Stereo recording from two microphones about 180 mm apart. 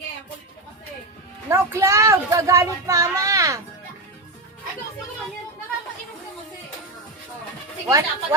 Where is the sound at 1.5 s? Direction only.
15° right (ahead or behind).